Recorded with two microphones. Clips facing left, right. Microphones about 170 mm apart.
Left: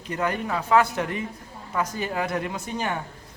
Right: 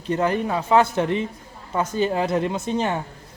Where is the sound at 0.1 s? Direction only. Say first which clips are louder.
Right 5 dB; 30° right (ahead or behind).